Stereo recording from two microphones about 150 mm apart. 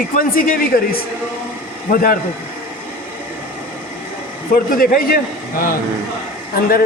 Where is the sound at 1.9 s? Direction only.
70° left (ahead or behind).